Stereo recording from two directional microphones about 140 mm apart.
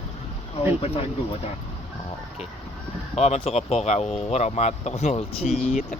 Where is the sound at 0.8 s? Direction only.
45° left (ahead or behind).